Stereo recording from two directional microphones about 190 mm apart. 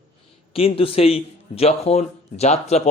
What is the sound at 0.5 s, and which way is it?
Speech, 30° left (ahead or behind).